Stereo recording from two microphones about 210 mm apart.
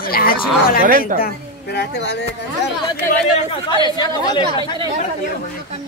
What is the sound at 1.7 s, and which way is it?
Speech, 55° left (ahead or behind).